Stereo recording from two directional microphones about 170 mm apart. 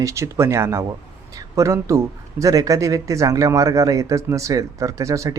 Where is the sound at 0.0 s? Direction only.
15° right (ahead or behind).